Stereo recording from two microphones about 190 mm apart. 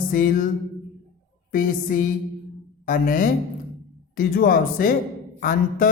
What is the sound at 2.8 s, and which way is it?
A man's voice, 45° left (ahead or behind).